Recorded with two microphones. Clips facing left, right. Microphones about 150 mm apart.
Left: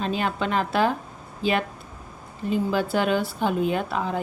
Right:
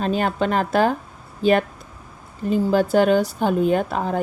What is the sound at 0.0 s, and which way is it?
A woman's voice, 45° right (ahead or behind).